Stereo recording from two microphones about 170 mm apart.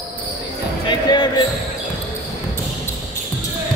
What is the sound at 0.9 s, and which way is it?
Speech, 30° left (ahead or behind).